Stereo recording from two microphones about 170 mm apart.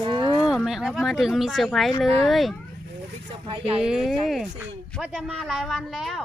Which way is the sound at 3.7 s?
5° right (ahead or behind).